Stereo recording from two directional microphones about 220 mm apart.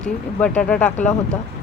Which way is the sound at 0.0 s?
5° left (ahead or behind).